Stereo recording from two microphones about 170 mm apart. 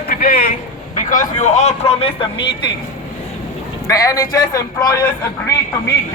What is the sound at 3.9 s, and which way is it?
A man's voice, 20° left (ahead or behind).